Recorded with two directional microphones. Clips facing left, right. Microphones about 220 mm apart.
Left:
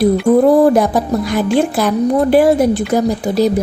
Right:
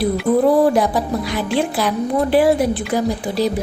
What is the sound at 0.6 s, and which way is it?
A woman's voice, 45° left (ahead or behind).